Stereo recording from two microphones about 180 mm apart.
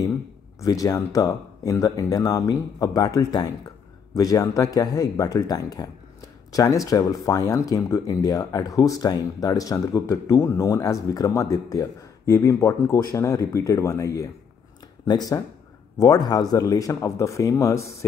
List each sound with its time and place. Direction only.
0.6 s speech: 20° left (ahead or behind)